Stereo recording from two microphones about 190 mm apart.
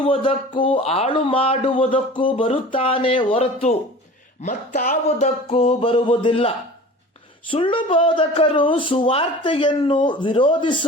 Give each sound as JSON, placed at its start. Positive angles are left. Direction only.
{"t": 0.0, "sound": "speech", "side_deg": 30}
{"t": 4.4, "sound": "music", "side_deg": 40}
{"t": 7.5, "sound": "speech", "side_deg": 25}